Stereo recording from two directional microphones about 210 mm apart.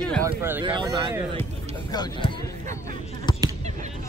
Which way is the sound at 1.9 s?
20° left (ahead or behind).